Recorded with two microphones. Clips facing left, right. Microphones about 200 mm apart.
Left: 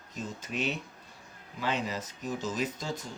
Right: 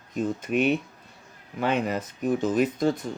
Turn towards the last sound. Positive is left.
turn(degrees=-60)  # may be behind; listen again after turning